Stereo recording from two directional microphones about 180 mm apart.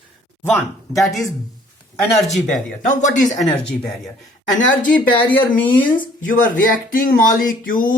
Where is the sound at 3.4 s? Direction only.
5° left (ahead or behind).